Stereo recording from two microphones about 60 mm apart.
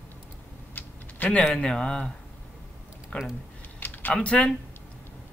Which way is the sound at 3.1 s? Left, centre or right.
Centre.